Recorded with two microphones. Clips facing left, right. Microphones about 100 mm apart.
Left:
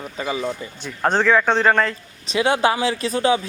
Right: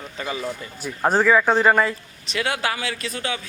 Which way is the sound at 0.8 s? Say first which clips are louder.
Right 1 dB; 5° right (ahead or behind).